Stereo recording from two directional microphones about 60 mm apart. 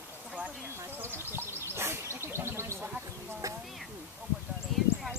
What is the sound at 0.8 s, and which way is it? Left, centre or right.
Speech, right.